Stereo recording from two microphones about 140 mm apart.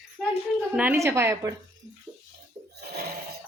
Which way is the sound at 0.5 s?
10° right (ahead or behind).